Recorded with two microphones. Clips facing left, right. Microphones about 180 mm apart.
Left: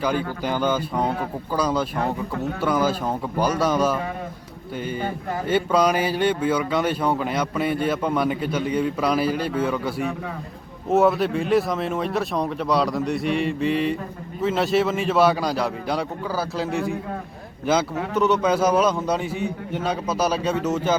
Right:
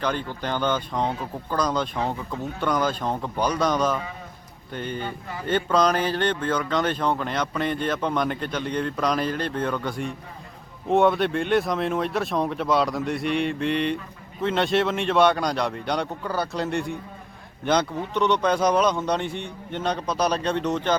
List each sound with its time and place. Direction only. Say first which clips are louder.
0.0 s speech: left 3 dB; 10° left (ahead or behind)
2.0 s speech: left 3 dB; 60° left (ahead or behind)
2.6 s speech: left 2 dB; 5° left (ahead or behind)
4.9 s speech: left 5 dB; 45° left (ahead or behind)
5.5 s speech: left 1 dB; 10° left (ahead or behind)
18.1 s speech: left 2 dB; 5° left (ahead or behind)